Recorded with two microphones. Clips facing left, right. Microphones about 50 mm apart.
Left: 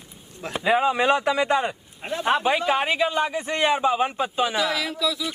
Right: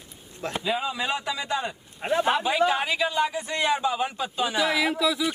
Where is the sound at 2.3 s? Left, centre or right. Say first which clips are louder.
Left 2 dB; left.